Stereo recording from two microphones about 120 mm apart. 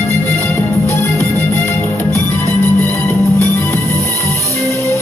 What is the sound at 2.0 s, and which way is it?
Music, 25° right (ahead or behind).